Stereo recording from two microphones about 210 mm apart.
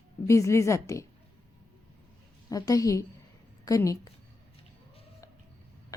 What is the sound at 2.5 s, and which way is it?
A woman's voice, 15° left (ahead or behind).